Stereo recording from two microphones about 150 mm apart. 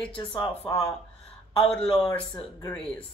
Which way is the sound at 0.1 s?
30° left (ahead or behind).